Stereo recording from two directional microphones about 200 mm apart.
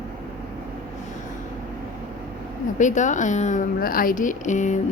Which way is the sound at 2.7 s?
40° left (ahead or behind).